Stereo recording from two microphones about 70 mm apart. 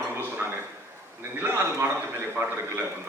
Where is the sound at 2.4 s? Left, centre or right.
Right.